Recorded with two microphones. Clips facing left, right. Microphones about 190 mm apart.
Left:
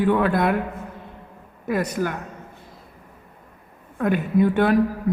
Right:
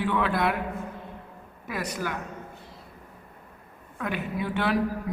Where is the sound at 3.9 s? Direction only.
50° left (ahead or behind).